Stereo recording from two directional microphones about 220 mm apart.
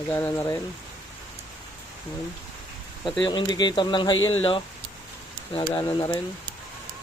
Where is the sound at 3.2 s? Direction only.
20° left (ahead or behind).